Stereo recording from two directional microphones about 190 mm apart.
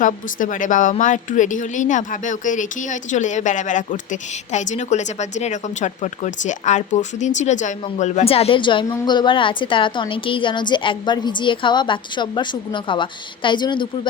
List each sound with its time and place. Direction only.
0.0 s a woman's voice: 45° left (ahead or behind); by 14.1 s 25° left (ahead or behind)